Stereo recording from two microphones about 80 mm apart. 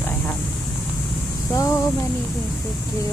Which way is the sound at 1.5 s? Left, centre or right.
Left.